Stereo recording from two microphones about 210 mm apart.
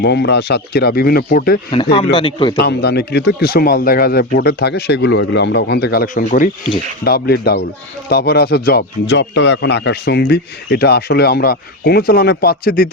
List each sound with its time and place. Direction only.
0.0 s speech: 50° left (ahead or behind)
1.7 s a man's voice: 25° left (ahead or behind)
2.6 s speech: 50° left (ahead or behind)